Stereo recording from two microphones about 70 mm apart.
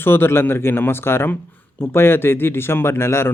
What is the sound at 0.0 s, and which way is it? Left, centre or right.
A man's voice, left.